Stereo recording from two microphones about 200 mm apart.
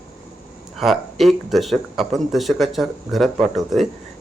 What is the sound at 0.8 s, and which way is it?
Speech, centre (ahead or behind).